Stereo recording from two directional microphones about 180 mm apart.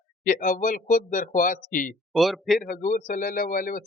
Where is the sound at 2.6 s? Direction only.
45° left (ahead or behind).